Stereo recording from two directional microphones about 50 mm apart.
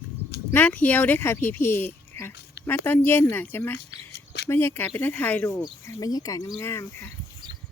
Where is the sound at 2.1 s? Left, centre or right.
Left.